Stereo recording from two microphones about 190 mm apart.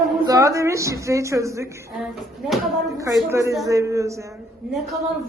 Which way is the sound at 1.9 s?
Centre (ahead or behind).